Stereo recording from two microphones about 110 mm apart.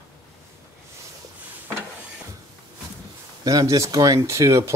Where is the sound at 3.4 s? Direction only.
30° right (ahead or behind).